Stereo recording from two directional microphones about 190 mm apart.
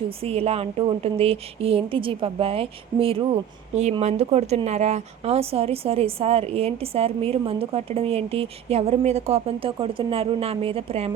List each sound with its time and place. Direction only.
0.2 s a woman's voice: 30° right (ahead or behind)